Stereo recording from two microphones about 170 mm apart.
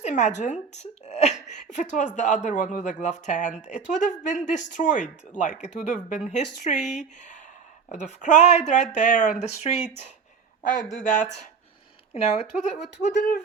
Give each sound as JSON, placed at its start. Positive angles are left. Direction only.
{"t": 0.0, "sound": "a woman's voice", "side_deg": 45}